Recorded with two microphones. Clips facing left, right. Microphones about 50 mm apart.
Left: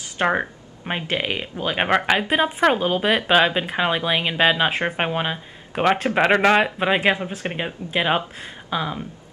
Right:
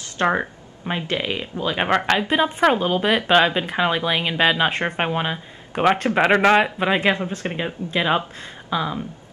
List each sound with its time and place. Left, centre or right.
0.2 s speech: centre
0.8 s speech: centre
6.9 s speech: centre